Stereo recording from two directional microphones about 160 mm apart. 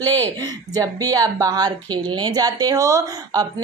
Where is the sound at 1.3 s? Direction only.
25° right (ahead or behind).